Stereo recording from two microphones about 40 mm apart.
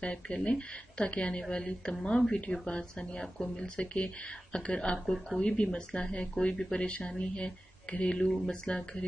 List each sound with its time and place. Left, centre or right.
0.0 s speech: left
4.9 s speech: centre
5.4 s speech: left